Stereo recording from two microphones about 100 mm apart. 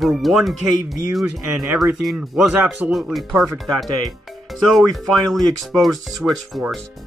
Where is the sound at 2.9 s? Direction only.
Centre (ahead or behind).